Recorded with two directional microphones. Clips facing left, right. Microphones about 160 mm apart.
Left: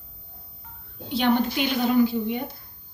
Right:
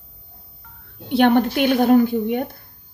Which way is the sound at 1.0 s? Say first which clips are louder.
Right 6 dB; 60° right (ahead or behind).